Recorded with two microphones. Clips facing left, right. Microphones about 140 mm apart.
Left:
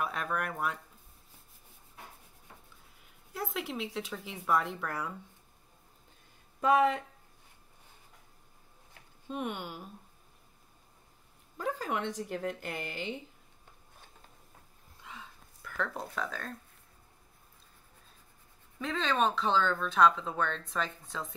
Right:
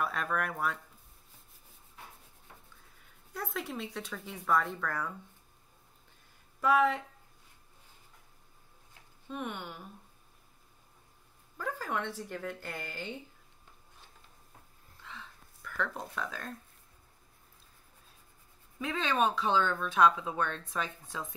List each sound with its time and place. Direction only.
0.0 s speech: 5° left (ahead or behind)
3.3 s speech: 5° left (ahead or behind)
6.6 s speech: 20° left (ahead or behind)
9.3 s speech: 20° left (ahead or behind)
11.5 s speech: 20° left (ahead or behind)
15.0 s a sound: 15° left (ahead or behind)
15.7 s speech: 5° left (ahead or behind)
18.8 s speech: 10° right (ahead or behind)